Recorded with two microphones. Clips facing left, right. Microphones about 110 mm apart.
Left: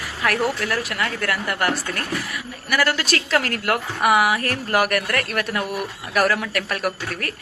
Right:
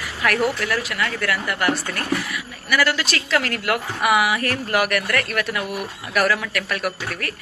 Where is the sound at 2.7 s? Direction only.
40° left (ahead or behind).